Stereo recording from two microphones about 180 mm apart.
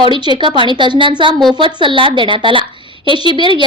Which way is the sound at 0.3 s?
25° right (ahead or behind).